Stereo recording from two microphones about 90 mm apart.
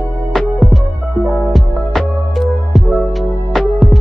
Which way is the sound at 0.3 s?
Centre (ahead or behind).